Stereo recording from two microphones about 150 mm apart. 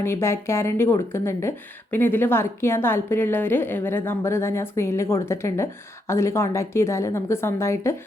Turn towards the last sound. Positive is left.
turn(degrees=20)  # may be behind; listen again after turning